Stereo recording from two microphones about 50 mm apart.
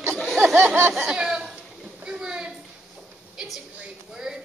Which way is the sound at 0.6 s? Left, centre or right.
Right.